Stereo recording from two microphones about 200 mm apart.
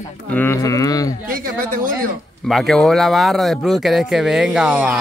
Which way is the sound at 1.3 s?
45° right (ahead or behind).